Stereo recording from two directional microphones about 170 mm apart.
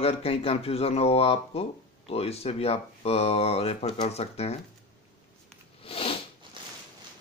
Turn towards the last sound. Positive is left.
turn(degrees=35)  # may be behind; listen again after turning